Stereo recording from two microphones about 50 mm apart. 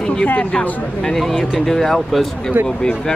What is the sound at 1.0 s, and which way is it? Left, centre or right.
Speech, centre.